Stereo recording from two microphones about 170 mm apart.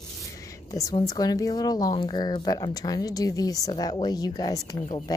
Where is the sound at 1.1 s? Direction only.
20° left (ahead or behind).